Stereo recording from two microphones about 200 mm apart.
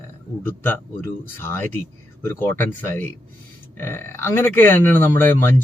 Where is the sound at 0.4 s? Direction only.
10° left (ahead or behind).